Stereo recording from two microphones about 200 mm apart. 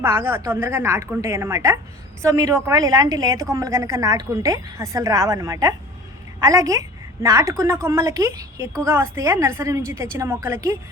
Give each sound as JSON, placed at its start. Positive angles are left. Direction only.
{"t": 0.0, "sound": "a woman's voice", "side_deg": -10}